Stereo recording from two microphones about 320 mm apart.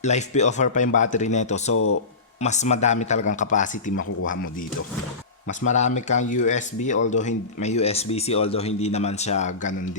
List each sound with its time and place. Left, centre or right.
0.0 s speech: left
1.7 s speech: left
2.4 s speech: left
5.6 s speech: left